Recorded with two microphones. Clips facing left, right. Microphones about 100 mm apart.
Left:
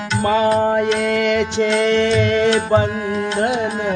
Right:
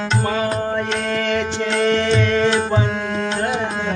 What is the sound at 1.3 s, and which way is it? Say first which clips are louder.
Music: left 3 dB; 20° left (ahead or behind).